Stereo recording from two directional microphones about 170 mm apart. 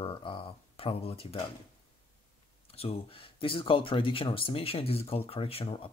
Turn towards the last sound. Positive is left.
turn(degrees=35)  # may be behind; listen again after turning